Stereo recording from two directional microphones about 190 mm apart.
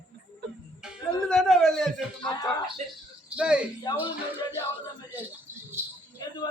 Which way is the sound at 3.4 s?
5° right (ahead or behind).